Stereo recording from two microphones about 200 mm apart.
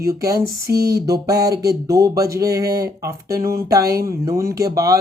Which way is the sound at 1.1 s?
20° right (ahead or behind).